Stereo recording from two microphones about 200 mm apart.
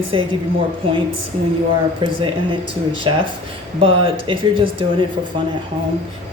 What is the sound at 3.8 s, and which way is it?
Speech, 30° right (ahead or behind).